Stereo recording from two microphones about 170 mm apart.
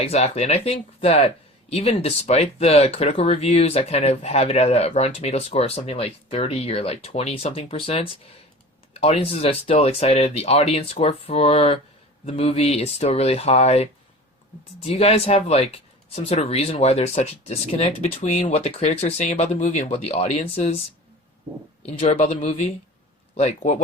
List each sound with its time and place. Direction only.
0.0 s speech: 40° left (ahead or behind)
21.8 s speech: 35° left (ahead or behind)